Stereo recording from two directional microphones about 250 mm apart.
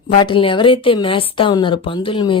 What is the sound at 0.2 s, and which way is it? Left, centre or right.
Speech, centre.